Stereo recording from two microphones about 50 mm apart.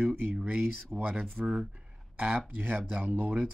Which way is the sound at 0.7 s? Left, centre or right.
Centre.